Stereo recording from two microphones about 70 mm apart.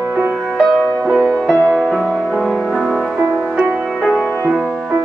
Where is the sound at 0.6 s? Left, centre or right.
Centre.